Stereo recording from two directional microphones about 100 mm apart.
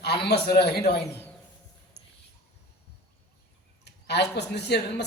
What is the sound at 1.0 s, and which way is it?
Speech, 25° left (ahead or behind).